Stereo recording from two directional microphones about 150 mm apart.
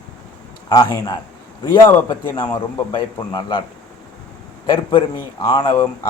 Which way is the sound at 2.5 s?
25° left (ahead or behind).